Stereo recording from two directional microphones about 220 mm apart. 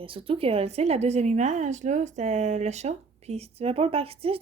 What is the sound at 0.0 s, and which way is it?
A woman's voice, 25° right (ahead or behind).